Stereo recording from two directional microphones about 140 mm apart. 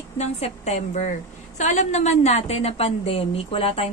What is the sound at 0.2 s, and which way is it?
A woman's voice, 50° left (ahead or behind).